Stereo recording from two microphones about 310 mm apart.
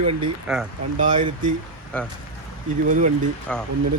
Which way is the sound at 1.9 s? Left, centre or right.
Centre.